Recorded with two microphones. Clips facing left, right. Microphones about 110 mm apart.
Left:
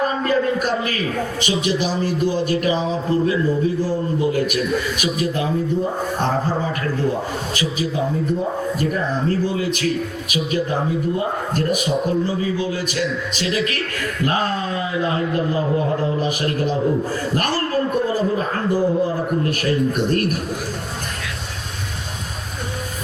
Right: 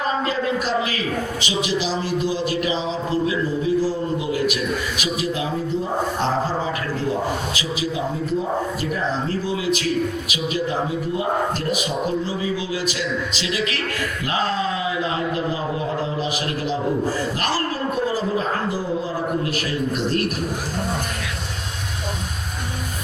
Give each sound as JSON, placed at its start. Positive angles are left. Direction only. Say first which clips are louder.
{"t": 0.3, "sound": "a man's voice", "louder": "left 3 dB", "side_deg": 50}
{"t": 7.5, "sound": "a man's voice", "louder": "left 3 dB", "side_deg": 55}
{"t": 10.3, "sound": "a man's voice", "louder": "left 5 dB", "side_deg": 50}
{"t": 12.2, "sound": "a man's voice", "louder": "left 3 dB", "side_deg": 55}
{"t": 17.3, "sound": "a man's voice", "louder": "left 4 dB", "side_deg": 50}
{"t": 20.0, "sound": "a man's voice", "louder": "left 3 dB", "side_deg": 50}